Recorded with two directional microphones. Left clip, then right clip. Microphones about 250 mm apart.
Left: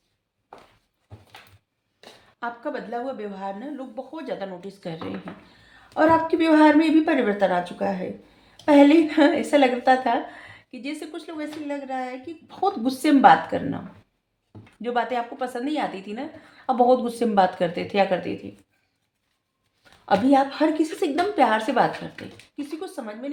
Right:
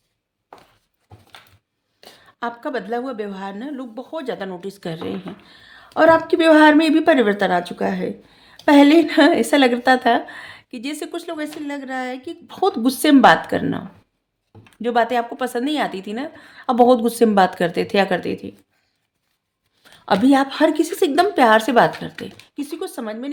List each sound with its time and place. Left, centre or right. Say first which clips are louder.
2.4 s speech: right 5 dB; right
19.8 s speech: right 4 dB; right